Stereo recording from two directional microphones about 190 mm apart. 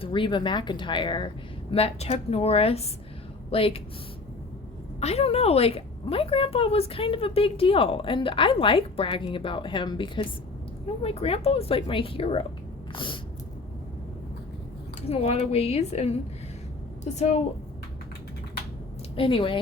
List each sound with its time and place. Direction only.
0.0 s a woman's voice: 25° left (ahead or behind)
4.9 s a woman's voice: 35° left (ahead or behind)
12.9 s a sound: 25° left (ahead or behind)
15.0 s a woman's voice: 30° left (ahead or behind)
19.1 s a woman's voice: 30° left (ahead or behind)